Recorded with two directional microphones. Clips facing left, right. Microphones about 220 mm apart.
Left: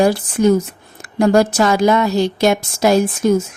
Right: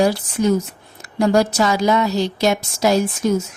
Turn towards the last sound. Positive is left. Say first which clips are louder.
# left 3 dB
turn(degrees=55)  # may be behind; listen again after turning